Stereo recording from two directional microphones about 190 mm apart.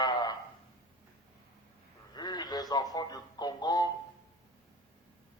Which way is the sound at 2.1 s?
20° left (ahead or behind).